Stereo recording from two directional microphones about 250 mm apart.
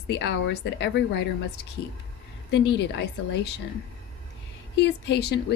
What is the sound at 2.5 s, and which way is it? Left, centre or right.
Speech, left.